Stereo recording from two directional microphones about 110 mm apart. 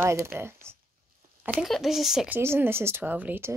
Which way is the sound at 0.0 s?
25° right (ahead or behind).